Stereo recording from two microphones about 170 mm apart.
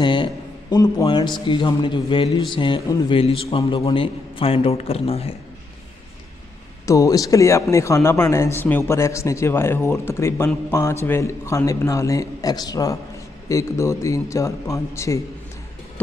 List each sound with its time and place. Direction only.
0.0 s a man's voice: 30° left (ahead or behind)
6.9 s a man's voice: 20° left (ahead or behind)